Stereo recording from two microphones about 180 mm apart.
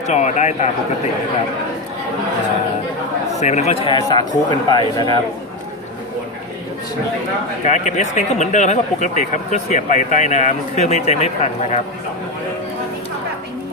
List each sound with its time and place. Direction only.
0.0 s speech: 40° left (ahead or behind)
3.3 s a man's voice: 40° left (ahead or behind); by 5.2 s 25° left (ahead or behind)
7.6 s speech: 40° left (ahead or behind)